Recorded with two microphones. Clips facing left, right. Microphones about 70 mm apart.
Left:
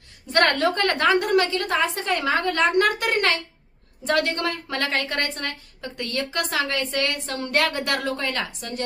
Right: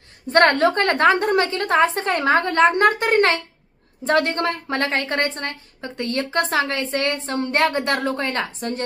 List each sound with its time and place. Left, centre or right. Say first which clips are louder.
0.3 s a woman's voice: right 5 dB; right